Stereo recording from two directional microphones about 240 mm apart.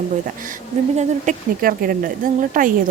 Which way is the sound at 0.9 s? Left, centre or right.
Right.